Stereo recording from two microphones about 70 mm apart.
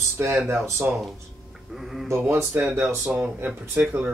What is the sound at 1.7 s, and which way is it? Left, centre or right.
Speech, centre.